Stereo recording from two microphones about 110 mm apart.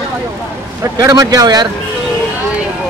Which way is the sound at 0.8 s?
30° right (ahead or behind).